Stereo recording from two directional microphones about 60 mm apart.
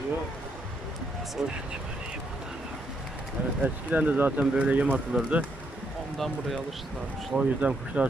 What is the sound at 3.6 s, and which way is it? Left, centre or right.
Speech, right.